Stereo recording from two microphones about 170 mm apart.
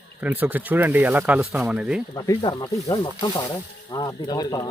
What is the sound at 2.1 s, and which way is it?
Speech, 20° left (ahead or behind).